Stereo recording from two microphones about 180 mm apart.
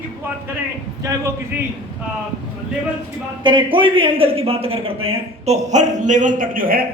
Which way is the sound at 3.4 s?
25° right (ahead or behind).